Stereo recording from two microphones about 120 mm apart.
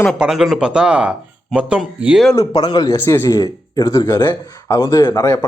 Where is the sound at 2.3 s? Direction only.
30° left (ahead or behind).